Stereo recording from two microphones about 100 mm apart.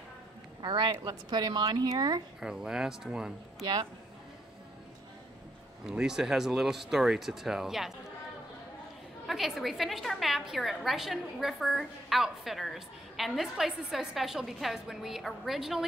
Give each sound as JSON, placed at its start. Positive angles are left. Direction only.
{"t": 0.6, "sound": "a man's voice", "side_deg": -50}
{"t": 2.4, "sound": "speech", "side_deg": -5}
{"t": 5.9, "sound": "a woman's voice", "side_deg": -5}
{"t": 9.3, "sound": "a woman's voice", "side_deg": 0}